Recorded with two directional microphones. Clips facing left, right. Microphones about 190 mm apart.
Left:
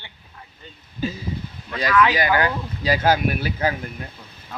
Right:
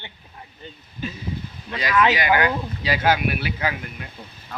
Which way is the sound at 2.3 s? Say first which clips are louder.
Right 1 dB; 15° right (ahead or behind).